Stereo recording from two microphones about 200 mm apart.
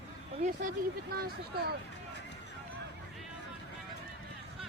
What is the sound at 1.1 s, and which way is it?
Speech, 50° right (ahead or behind).